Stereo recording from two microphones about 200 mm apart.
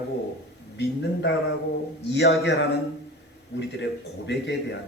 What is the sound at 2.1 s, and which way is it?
Speech, 55° left (ahead or behind).